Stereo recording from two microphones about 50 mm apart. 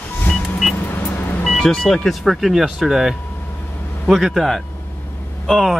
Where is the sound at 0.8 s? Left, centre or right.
Left.